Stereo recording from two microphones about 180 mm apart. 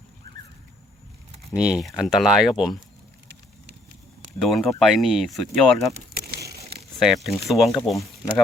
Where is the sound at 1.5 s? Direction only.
5° right (ahead or behind).